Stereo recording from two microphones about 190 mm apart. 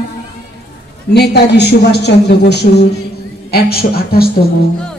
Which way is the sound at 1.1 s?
60° left (ahead or behind).